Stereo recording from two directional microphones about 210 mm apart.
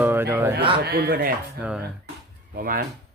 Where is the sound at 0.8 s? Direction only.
50° right (ahead or behind).